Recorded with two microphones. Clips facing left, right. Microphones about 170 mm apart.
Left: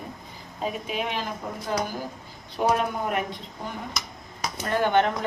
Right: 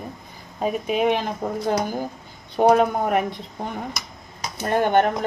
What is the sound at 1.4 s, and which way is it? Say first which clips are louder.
Speech: right 8 dB; 60° right (ahead or behind).